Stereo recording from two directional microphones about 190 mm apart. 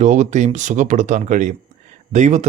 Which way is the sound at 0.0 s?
40° right (ahead or behind).